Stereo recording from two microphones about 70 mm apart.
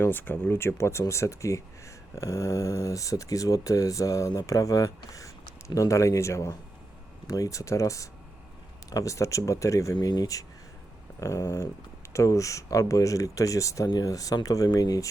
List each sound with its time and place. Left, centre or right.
0.1 s speech: left
11.2 s speech: left